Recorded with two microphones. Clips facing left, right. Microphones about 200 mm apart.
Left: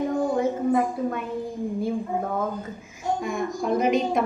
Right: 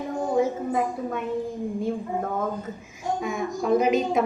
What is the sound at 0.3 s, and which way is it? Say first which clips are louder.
Speech: right 2 dB; centre (ahead or behind).